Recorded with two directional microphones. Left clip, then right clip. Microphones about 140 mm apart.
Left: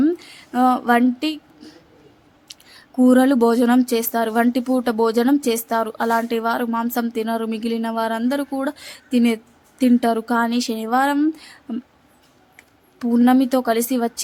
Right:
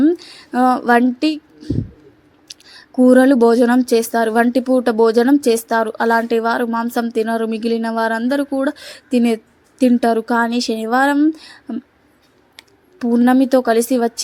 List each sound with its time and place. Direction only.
0.0 s a sound: 20° right (ahead or behind)
2.6 s speech: 20° right (ahead or behind)
13.0 s speech: 15° right (ahead or behind)